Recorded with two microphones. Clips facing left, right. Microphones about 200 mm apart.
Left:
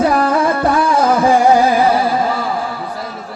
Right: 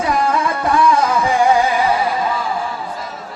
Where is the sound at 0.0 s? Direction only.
60° left (ahead or behind).